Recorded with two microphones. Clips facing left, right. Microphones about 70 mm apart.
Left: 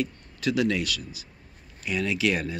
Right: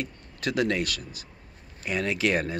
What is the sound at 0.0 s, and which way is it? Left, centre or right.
Speech, right.